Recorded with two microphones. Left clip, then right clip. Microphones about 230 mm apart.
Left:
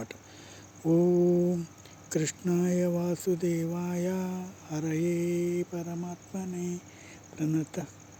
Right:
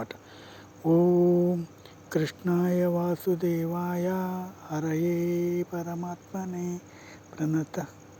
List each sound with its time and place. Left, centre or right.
0.9 s speech: centre
1.2 s humming: centre
2.0 s speech: centre